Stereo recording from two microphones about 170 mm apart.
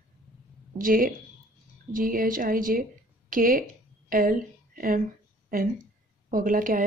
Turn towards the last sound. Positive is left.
turn(degrees=-50)  # may be behind; listen again after turning